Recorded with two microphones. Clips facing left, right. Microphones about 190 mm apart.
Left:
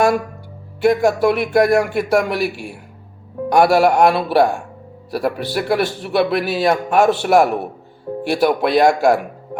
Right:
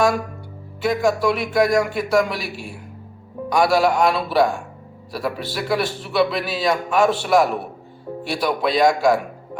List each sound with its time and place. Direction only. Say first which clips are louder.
0.8 s a man's voice: left 5 dB; 60° left (ahead or behind)